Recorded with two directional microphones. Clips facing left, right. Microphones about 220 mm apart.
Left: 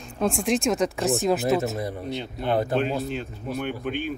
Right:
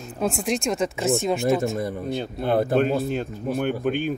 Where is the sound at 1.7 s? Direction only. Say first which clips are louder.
Right 3 dB; 50° right (ahead or behind).